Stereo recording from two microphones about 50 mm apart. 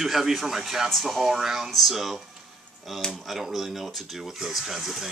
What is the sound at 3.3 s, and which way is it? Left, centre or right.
Speech, centre.